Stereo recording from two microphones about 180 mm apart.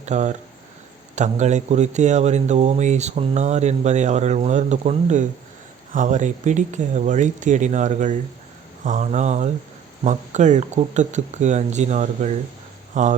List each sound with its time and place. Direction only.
0.0 s speech: 40° right (ahead or behind)